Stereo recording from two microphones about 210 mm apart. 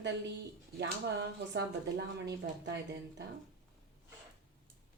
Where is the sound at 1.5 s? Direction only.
55° right (ahead or behind).